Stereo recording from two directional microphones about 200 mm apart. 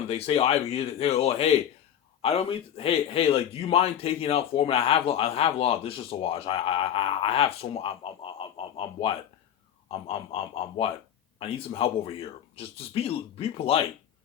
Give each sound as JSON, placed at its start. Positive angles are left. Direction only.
{"t": 0.1, "sound": "a man's voice", "side_deg": 30}